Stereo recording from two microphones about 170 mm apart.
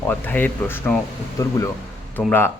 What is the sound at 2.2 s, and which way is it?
Speech, 10° left (ahead or behind).